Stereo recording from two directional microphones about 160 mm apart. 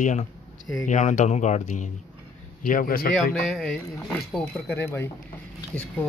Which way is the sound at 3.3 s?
Centre (ahead or behind).